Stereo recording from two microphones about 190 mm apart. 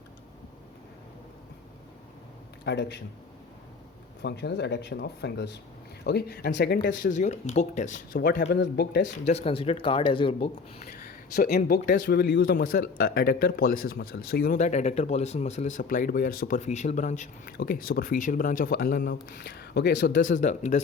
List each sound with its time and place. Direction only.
2.6 s speech: 65° left (ahead or behind)
4.2 s speech: 60° left (ahead or behind)
7.1 s speech: 40° left (ahead or behind)
8.1 s speech: 60° left (ahead or behind)
9.2 s speech: 35° left (ahead or behind)
10.8 s speech: 55° left (ahead or behind)
20.2 s speech: 40° left (ahead or behind)